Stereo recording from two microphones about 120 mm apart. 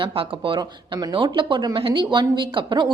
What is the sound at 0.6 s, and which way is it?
A woman's voice, 35° right (ahead or behind).